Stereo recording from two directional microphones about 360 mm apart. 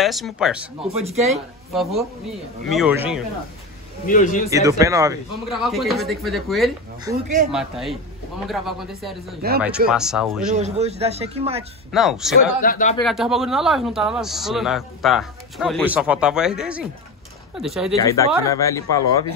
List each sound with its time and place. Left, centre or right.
0.0 s speech: centre
4.0 s a man's voice: left
4.5 s speech: centre
10.5 s speech: centre
11.9 s speech: centre
12.6 s a man's voice: left
13.0 s speech: centre